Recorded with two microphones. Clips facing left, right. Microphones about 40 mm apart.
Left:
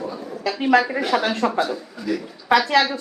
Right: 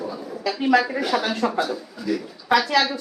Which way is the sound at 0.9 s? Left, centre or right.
Left.